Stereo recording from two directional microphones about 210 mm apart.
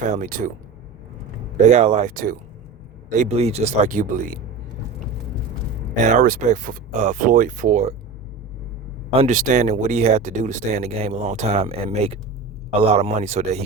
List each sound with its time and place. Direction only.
0.0 s speech: 35° right (ahead or behind)
1.7 s speech: 30° right (ahead or behind)
6.1 s speech: 40° right (ahead or behind)
9.1 s speech: 35° right (ahead or behind)